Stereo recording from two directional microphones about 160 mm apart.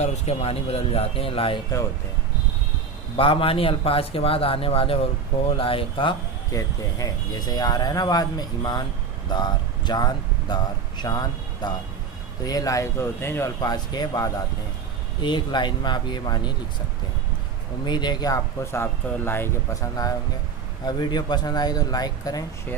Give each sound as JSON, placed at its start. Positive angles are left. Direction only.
{"t": 0.0, "sound": "speech", "side_deg": 40}
{"t": 3.2, "sound": "speech", "side_deg": 35}
{"t": 17.8, "sound": "speech", "side_deg": 25}